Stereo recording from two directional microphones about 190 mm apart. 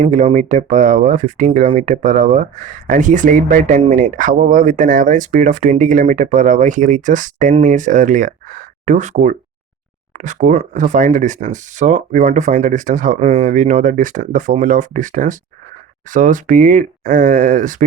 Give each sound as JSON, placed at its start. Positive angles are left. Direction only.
{"t": 0.0, "sound": "speech", "side_deg": -40}